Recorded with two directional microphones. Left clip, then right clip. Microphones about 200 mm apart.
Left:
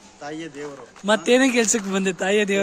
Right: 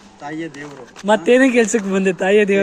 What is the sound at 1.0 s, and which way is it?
Speech, 25° left (ahead or behind).